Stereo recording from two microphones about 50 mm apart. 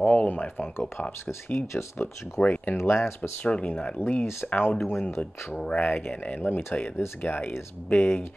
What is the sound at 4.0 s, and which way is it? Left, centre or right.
Speech, left.